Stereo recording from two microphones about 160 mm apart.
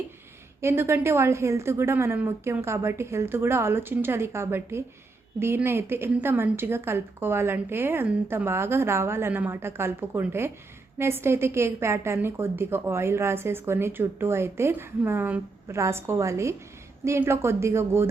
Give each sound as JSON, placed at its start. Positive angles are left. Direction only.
{"t": 0.6, "sound": "a woman's voice", "side_deg": -15}